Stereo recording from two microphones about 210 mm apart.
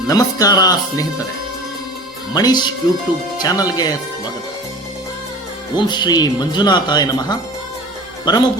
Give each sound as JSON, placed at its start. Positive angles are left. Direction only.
{"t": 0.1, "sound": "speech", "side_deg": 15}
{"t": 2.3, "sound": "speech", "side_deg": 20}
{"t": 5.7, "sound": "speech", "side_deg": 20}